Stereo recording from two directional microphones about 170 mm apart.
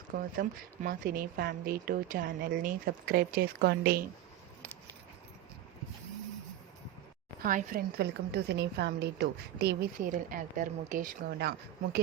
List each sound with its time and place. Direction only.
0.1 s a woman's voice: 55° right (ahead or behind)
7.4 s a woman's voice: 55° right (ahead or behind); by 9.7 s 75° right (ahead or behind)
10.0 s a woman's voice: 50° right (ahead or behind)